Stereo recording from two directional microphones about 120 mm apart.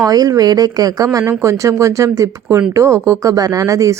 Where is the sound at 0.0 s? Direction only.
30° right (ahead or behind).